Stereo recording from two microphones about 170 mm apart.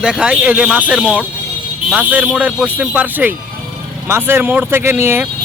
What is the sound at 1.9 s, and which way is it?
Speech, 10° right (ahead or behind).